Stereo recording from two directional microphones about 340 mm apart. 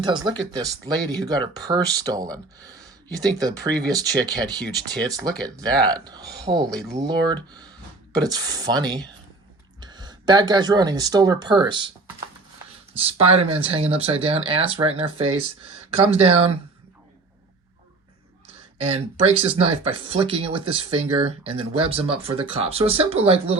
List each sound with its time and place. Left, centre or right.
0.0 s speech: centre
18.9 s speech: centre